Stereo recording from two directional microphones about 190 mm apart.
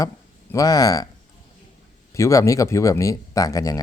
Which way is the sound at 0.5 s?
20° left (ahead or behind).